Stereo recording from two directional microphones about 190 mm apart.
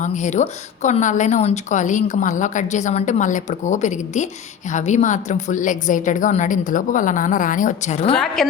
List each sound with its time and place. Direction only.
0.0 s a woman's voice: 40° left (ahead or behind)